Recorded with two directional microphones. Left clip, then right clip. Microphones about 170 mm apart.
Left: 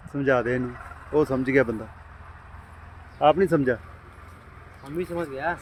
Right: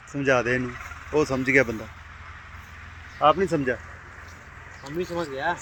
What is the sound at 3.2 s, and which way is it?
Speech, 35° left (ahead or behind).